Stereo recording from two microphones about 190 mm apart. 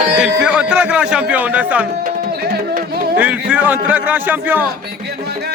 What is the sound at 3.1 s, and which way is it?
Speech, 10° right (ahead or behind).